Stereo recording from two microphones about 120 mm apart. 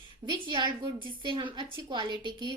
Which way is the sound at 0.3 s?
40° right (ahead or behind).